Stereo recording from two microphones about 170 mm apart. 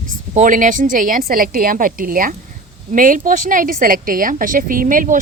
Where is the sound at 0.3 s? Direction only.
50° right (ahead or behind).